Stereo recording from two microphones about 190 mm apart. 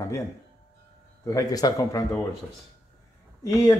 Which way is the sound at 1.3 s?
20° left (ahead or behind).